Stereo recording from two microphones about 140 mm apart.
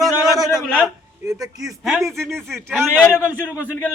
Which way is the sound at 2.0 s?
20° right (ahead or behind).